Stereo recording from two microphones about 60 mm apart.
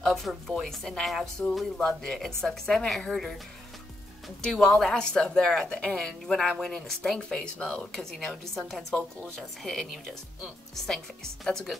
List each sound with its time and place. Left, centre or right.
0.0 s speech: centre
1.4 s a woman's voice: centre
4.5 s a woman's voice: centre
7.5 s speech: left
7.8 s speech: centre
11.4 s speech: centre